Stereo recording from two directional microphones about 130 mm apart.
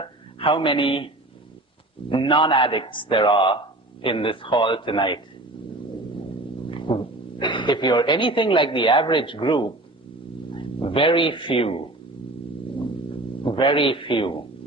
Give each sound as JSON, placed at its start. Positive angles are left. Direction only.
{"t": 0.0, "sound": "a man's voice", "side_deg": 40}
{"t": 6.7, "sound": "a man's voice", "side_deg": 40}
{"t": 13.4, "sound": "a man's voice", "side_deg": 40}